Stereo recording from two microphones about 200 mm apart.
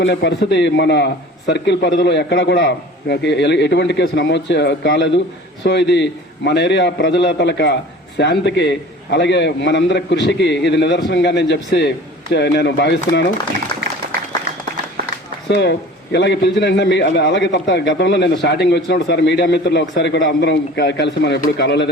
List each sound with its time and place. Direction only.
0.0 s a man's voice: 60° left (ahead or behind)
14.0 s applause: 40° right (ahead or behind)
15.4 s a man's voice: 55° left (ahead or behind)